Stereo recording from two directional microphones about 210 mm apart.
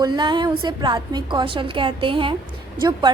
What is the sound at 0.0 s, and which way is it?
A woman's voice, 20° right (ahead or behind).